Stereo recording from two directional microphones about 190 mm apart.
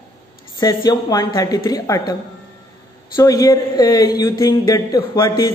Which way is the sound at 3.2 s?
20° left (ahead or behind).